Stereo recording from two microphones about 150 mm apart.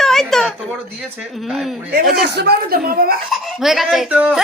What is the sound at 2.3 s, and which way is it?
Speech, 90° right.